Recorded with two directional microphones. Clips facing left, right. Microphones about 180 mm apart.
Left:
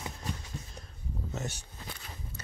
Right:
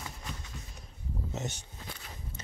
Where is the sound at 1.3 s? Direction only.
20° right (ahead or behind).